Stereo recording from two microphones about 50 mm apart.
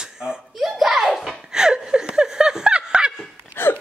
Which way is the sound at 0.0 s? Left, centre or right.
Centre.